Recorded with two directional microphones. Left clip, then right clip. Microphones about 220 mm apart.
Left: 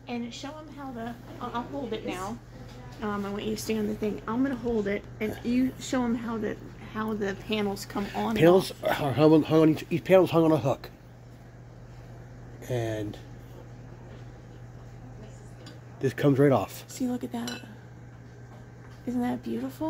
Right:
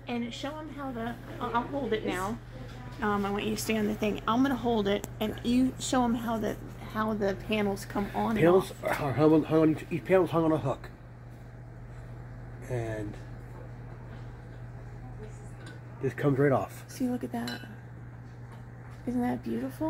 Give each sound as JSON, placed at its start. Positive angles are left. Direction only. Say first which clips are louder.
{"t": 0.0, "sound": "a woman's voice", "louder": "right 1 dB", "side_deg": -20}
{"t": 3.0, "sound": "a woman's voice", "louder": "right 3 dB", "side_deg": -35}
{"t": 8.4, "sound": "speech", "louder": "left 4 dB", "side_deg": 40}
{"t": 12.6, "sound": "speech", "louder": "left 4 dB", "side_deg": 45}
{"t": 16.0, "sound": "speech", "louder": "left 4 dB", "side_deg": 45}
{"t": 16.9, "sound": "a woman's voice", "louder": "right 1 dB", "side_deg": -5}
{"t": 19.0, "sound": "a woman's voice", "louder": "left 1 dB", "side_deg": -5}